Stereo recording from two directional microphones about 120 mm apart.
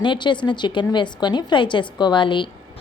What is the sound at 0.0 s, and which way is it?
A woman's voice, 40° left (ahead or behind).